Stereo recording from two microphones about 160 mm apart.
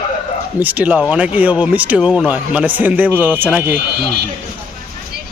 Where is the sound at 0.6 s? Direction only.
10° right (ahead or behind).